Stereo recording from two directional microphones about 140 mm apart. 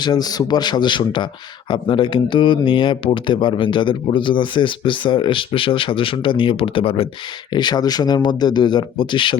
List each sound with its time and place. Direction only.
0.0 s speech: 30° left (ahead or behind)
7.5 s speech: 30° left (ahead or behind)